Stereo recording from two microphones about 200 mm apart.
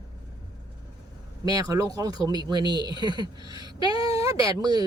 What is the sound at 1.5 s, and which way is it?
Speech, 15° right (ahead or behind).